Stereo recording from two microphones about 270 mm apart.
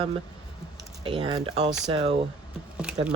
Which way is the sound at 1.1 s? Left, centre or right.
Centre.